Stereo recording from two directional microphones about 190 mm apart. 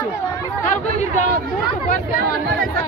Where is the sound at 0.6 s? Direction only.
40° left (ahead or behind).